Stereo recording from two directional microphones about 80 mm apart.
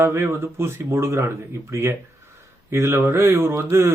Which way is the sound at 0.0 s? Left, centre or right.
Right.